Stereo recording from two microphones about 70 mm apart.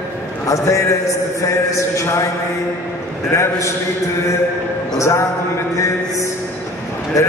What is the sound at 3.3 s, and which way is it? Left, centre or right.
Speech, left.